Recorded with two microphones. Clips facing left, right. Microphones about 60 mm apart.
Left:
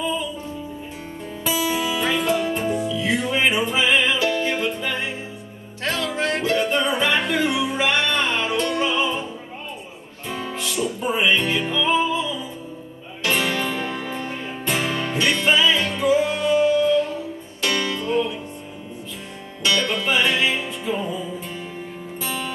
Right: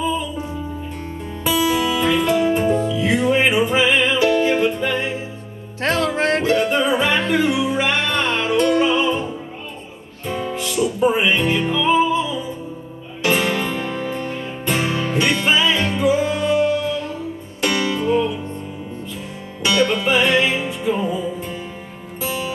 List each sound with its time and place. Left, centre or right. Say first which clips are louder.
1.4 s music: right 5 dB; centre
5.8 s music: right 5 dB; right
6.4 s music: right 3 dB; centre
19.6 s music: right 4 dB; centre